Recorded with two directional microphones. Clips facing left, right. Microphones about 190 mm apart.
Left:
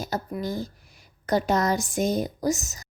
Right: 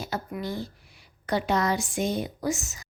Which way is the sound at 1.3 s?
45° left (ahead or behind).